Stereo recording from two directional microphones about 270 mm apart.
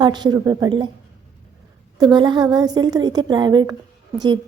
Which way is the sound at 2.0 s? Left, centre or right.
Centre.